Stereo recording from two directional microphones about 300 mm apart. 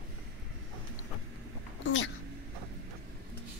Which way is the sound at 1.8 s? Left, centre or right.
Left.